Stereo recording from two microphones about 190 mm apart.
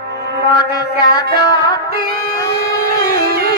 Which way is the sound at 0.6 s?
20° left (ahead or behind).